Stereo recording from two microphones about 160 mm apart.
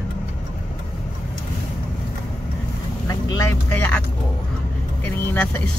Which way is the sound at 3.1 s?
20° left (ahead or behind).